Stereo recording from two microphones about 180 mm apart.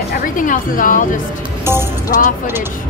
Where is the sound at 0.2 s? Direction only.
50° left (ahead or behind).